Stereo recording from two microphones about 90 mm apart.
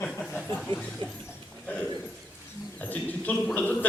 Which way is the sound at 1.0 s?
70° right (ahead or behind).